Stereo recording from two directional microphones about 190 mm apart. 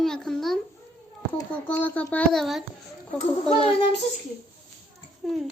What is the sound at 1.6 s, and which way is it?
Speech, 5° left (ahead or behind).